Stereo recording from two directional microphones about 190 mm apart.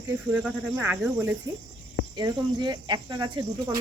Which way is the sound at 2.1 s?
20° right (ahead or behind).